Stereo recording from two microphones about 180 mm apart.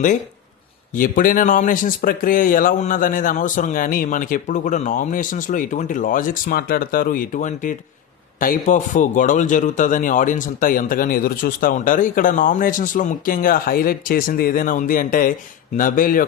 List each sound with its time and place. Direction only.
0.9 s a man's voice: 50° left (ahead or behind)